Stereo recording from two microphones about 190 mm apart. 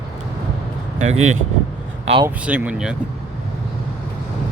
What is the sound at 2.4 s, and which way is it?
Speech, 5° right (ahead or behind).